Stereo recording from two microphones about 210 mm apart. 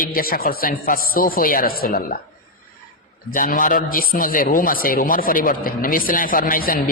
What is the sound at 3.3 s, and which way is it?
A man's voice, 40° left (ahead or behind).